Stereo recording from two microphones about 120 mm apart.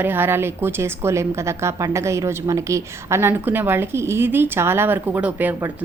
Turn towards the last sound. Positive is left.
turn(degrees=-15)  # may be behind; listen again after turning